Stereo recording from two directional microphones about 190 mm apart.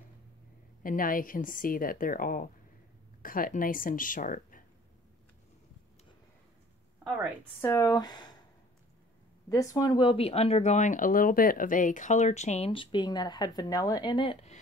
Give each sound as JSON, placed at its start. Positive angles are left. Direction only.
{"t": 0.8, "sound": "speech", "side_deg": 45}
{"t": 7.6, "sound": "speech", "side_deg": 15}
{"t": 9.5, "sound": "speech", "side_deg": 20}